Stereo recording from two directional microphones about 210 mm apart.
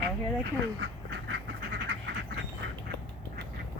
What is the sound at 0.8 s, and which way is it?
Duck, 55° right (ahead or behind).